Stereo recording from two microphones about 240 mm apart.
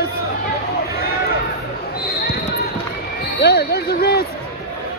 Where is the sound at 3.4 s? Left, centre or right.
Left.